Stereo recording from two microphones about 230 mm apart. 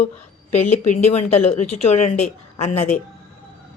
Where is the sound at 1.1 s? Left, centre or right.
Left.